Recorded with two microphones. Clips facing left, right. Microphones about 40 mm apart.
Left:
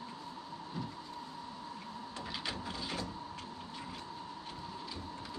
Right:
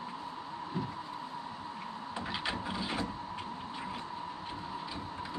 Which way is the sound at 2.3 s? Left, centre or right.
Right.